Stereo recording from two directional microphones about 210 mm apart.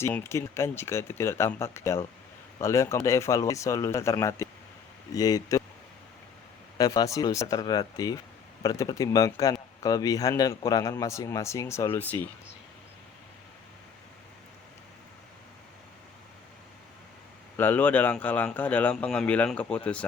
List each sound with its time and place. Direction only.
0.0 s speech: 10° left (ahead or behind)
6.7 s speech: 15° left (ahead or behind)
17.6 s speech: 10° left (ahead or behind)